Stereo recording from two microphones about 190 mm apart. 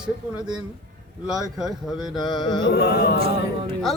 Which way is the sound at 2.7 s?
60° left (ahead or behind).